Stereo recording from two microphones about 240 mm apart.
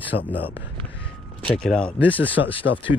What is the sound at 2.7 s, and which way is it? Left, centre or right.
Speech, left.